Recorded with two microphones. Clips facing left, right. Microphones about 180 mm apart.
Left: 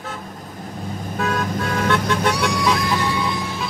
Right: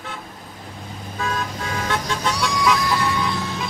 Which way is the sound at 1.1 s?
55° left (ahead or behind).